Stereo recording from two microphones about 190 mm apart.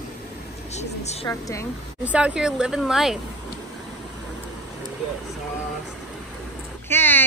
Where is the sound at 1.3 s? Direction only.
15° left (ahead or behind).